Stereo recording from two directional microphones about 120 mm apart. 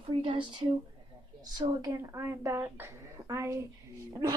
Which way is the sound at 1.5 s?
30° right (ahead or behind).